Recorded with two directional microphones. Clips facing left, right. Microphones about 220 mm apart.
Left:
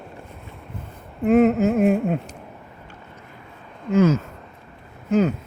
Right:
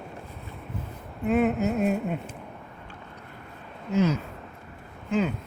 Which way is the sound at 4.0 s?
45° left (ahead or behind).